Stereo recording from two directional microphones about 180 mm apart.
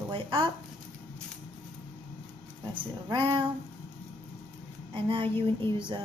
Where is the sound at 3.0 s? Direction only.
25° right (ahead or behind).